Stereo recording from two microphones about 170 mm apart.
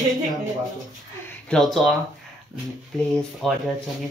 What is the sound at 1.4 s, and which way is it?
Speech, centre (ahead or behind).